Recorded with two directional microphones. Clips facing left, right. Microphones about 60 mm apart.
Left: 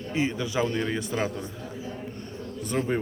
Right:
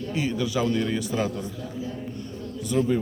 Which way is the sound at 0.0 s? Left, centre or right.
Left.